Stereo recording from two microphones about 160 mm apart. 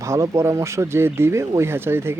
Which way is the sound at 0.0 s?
20° right (ahead or behind).